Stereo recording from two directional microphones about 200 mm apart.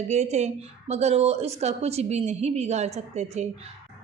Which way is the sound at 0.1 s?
35° right (ahead or behind).